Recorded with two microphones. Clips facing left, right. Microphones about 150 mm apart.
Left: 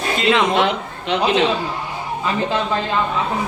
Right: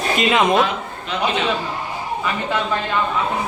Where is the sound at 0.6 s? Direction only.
75° left (ahead or behind).